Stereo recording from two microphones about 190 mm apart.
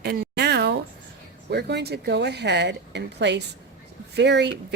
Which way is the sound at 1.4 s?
60° right (ahead or behind).